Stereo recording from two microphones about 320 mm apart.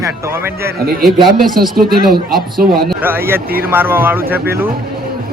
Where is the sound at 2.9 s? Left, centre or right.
Centre.